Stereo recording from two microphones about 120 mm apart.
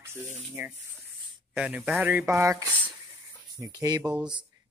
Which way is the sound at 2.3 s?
25° right (ahead or behind).